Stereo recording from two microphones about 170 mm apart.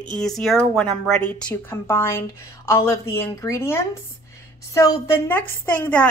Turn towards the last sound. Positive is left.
turn(degrees=10)  # may be behind; listen again after turning